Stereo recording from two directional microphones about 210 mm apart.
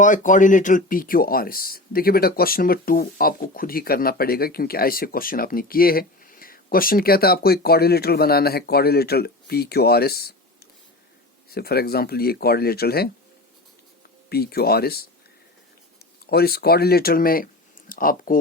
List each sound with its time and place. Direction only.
0.0 s speech: 35° left (ahead or behind)
11.5 s speech: 45° left (ahead or behind)
14.3 s speech: 50° left (ahead or behind)
16.3 s speech: 50° left (ahead or behind)